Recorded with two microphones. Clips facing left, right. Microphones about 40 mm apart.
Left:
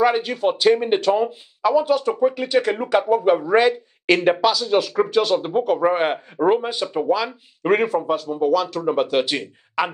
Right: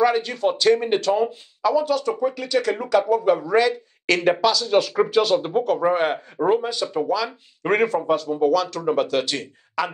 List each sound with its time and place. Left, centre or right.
0.0 s speech: centre
7.2 s speech: centre